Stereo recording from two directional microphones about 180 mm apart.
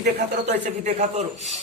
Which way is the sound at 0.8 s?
35° right (ahead or behind).